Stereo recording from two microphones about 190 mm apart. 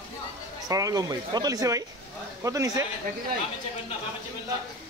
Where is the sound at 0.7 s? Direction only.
20° right (ahead or behind).